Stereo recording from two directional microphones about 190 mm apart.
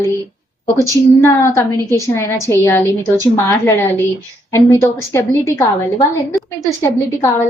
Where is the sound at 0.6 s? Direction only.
15° left (ahead or behind).